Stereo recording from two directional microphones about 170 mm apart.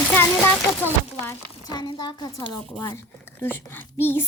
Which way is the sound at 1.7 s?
25° left (ahead or behind).